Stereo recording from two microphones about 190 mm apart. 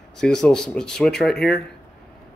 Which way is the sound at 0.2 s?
5° left (ahead or behind).